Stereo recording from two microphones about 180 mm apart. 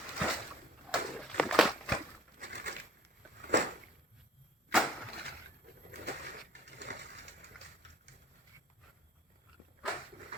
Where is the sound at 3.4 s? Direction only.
75° right (ahead or behind).